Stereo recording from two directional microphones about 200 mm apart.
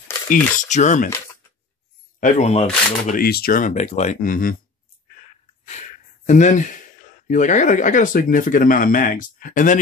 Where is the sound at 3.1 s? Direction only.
50° left (ahead or behind).